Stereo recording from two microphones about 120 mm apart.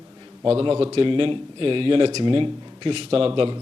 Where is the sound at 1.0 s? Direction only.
45° right (ahead or behind).